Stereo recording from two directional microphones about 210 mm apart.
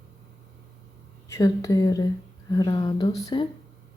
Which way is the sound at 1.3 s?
15° left (ahead or behind).